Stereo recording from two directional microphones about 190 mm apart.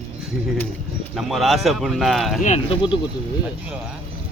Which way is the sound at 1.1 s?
Centre (ahead or behind).